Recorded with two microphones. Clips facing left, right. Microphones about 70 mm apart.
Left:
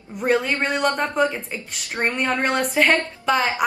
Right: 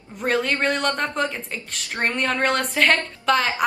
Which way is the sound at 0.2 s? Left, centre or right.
Centre.